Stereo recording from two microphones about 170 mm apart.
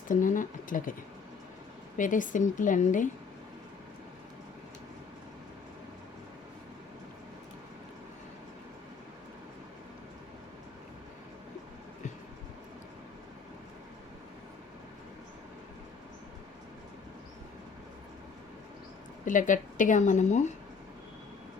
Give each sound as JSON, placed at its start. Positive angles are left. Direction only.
{"t": 0.1, "sound": "speech", "side_deg": 50}
{"t": 2.0, "sound": "speech", "side_deg": 50}
{"t": 19.2, "sound": "a woman's voice", "side_deg": 50}